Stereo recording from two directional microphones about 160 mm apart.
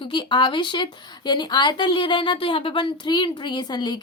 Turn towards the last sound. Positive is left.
turn(degrees=30)  # may be behind; listen again after turning